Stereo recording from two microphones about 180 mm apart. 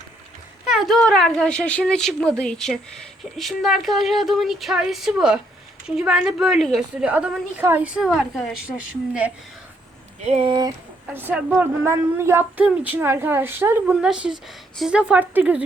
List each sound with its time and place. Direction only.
0.6 s a woman's voice: centre (ahead or behind)
10.2 s speech: 35° right (ahead or behind)
11.1 s a woman's voice: 10° right (ahead or behind)